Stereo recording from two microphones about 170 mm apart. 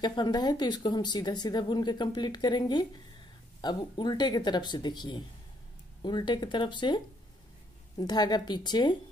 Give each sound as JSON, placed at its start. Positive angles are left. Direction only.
{"t": 0.0, "sound": "speech", "side_deg": 25}
{"t": 8.0, "sound": "speech", "side_deg": 25}